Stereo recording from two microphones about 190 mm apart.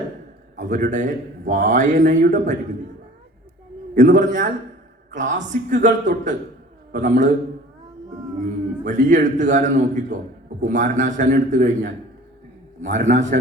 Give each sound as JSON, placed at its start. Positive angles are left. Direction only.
{"t": 0.5, "sound": "a man's voice", "side_deg": -40}
{"t": 3.9, "sound": "a man's voice", "side_deg": -40}
{"t": 8.4, "sound": "a man's voice", "side_deg": -40}
{"t": 12.9, "sound": "a man's voice", "side_deg": -75}
{"t": 13.1, "sound": "a man's voice", "side_deg": -40}